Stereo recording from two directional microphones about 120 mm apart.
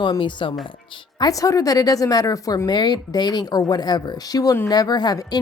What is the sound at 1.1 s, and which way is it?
A woman's voice, 30° left (ahead or behind).